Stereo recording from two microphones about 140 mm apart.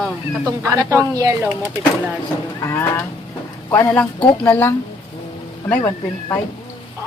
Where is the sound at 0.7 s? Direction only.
20° right (ahead or behind).